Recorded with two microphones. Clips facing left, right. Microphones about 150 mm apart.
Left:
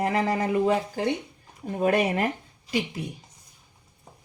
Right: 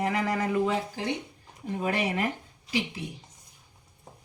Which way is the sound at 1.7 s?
45° left (ahead or behind).